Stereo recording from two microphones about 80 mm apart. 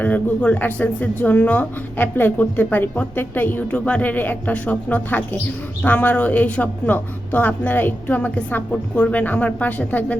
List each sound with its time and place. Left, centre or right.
0.0 s speech: centre